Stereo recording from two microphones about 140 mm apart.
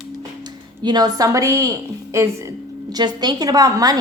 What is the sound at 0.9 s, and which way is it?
A woman's voice, 30° right (ahead or behind).